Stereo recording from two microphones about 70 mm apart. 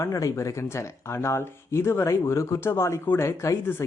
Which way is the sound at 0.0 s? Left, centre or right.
Left.